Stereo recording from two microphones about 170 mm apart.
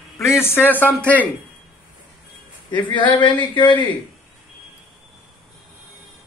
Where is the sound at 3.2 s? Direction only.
25° left (ahead or behind).